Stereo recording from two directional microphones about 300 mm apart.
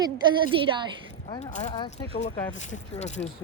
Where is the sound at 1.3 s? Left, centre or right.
Left.